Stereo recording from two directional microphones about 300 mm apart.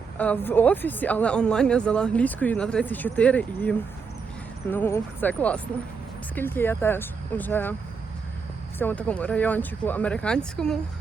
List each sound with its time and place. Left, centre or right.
0.2 s speech: centre
8.8 s speech: centre